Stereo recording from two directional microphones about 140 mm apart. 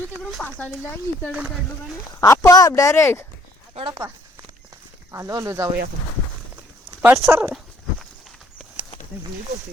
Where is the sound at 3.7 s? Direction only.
35° right (ahead or behind).